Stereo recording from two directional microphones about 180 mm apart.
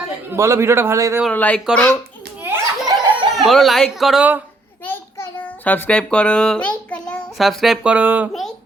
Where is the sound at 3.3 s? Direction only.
Centre (ahead or behind).